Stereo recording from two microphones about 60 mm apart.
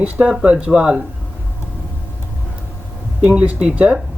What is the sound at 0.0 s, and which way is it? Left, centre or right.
Speech, centre.